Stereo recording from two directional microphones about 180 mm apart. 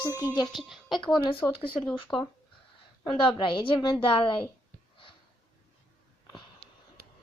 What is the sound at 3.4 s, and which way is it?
Speech, 25° left (ahead or behind).